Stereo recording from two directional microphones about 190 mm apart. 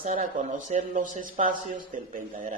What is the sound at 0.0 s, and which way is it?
Speech, 40° right (ahead or behind).